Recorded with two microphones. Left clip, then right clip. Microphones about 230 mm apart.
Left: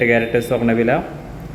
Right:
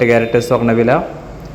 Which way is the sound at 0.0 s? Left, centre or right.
Centre.